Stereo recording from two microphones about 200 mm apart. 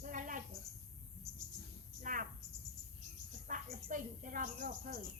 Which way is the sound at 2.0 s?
40° right (ahead or behind).